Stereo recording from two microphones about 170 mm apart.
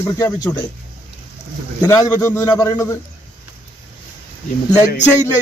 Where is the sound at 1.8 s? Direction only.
15° left (ahead or behind).